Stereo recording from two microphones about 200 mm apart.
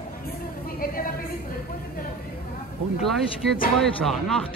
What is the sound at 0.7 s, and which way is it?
Speech, 45° left (ahead or behind).